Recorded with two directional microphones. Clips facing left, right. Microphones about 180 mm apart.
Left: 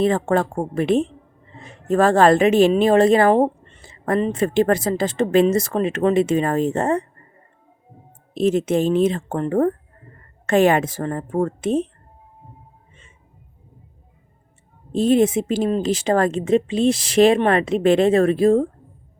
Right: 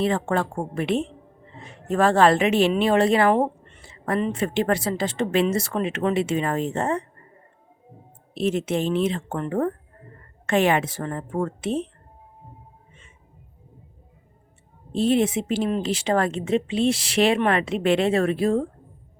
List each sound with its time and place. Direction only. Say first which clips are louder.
0.0 s a woman's voice: left 5 dB; 40° left (ahead or behind)
8.3 s a woman's voice: left 5 dB; 45° left (ahead or behind)
14.9 s speech: left 4 dB; 45° left (ahead or behind)